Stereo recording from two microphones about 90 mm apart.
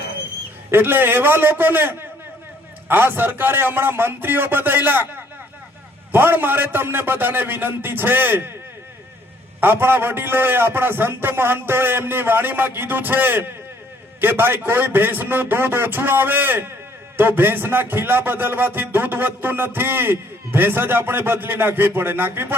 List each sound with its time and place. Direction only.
0.7 s a man's voice: 25° right (ahead or behind)
9.6 s a man's voice: 25° right (ahead or behind)